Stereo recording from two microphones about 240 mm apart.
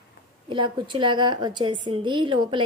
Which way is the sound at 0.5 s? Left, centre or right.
Centre.